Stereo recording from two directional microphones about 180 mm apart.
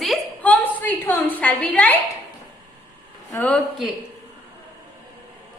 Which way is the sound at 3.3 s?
10° left (ahead or behind).